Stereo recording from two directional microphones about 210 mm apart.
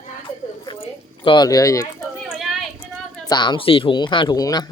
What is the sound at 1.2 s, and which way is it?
Speech, 20° left (ahead or behind).